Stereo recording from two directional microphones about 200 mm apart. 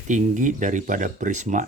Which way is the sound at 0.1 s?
40° right (ahead or behind).